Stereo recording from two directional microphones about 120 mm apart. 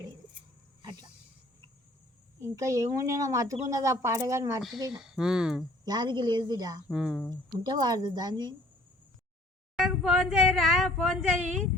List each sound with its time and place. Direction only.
2.4 s speech: 25° right (ahead or behind)
4.9 s speech: 5° right (ahead or behind)
5.8 s a woman's voice: 35° right (ahead or behind)
6.8 s speech: 5° right (ahead or behind)
7.6 s a woman's voice: 35° right (ahead or behind)
9.7 s speech: 5° right (ahead or behind)